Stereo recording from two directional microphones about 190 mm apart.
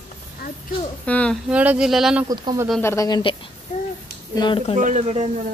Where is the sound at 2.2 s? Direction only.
20° right (ahead or behind).